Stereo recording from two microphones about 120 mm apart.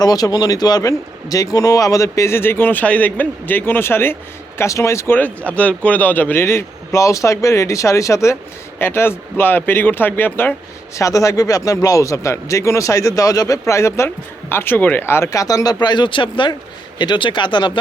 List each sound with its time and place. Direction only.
0.0 s speech: 30° left (ahead or behind)